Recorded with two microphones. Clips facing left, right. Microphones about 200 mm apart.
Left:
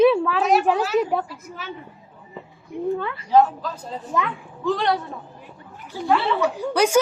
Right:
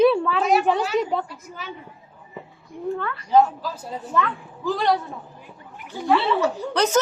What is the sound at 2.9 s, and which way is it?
Speech, 15° left (ahead or behind).